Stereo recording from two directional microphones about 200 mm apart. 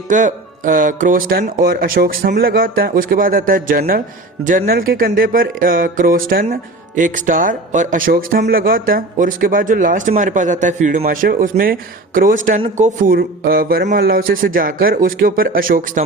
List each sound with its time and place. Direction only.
0.1 s speech: 40° right (ahead or behind)